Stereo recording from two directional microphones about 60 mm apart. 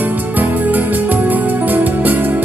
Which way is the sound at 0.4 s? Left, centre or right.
Right.